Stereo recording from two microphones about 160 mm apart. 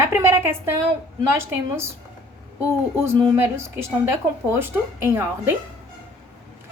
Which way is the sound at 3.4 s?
15° right (ahead or behind).